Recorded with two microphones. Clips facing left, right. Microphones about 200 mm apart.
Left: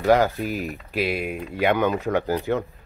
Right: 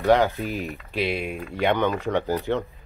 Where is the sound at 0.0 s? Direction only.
5° left (ahead or behind).